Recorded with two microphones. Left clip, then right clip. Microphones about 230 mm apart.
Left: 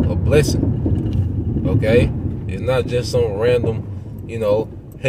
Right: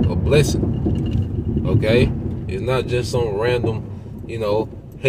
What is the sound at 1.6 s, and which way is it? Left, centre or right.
Speech, centre.